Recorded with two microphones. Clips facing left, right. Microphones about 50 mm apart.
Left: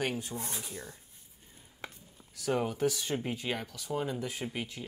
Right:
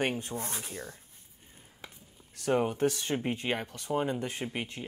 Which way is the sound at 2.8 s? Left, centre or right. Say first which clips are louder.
Right 2 dB; right.